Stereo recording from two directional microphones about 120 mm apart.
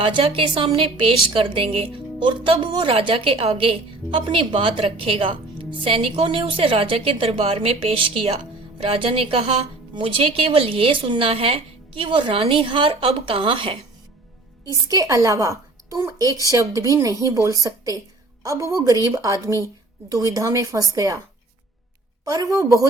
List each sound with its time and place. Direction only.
0.0 s a woman's voice: 50° right (ahead or behind)
14.8 s a woman's voice: 30° right (ahead or behind)
22.2 s speech: 30° right (ahead or behind)